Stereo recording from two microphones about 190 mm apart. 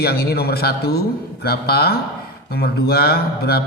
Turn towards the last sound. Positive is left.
turn(degrees=55)  # may be behind; listen again after turning